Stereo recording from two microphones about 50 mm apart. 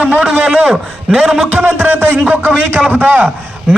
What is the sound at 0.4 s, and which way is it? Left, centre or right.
Speech, right.